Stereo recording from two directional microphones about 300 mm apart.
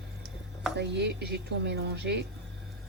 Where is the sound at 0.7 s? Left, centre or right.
Right.